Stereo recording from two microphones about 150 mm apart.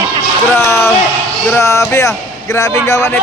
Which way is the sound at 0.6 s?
15° left (ahead or behind).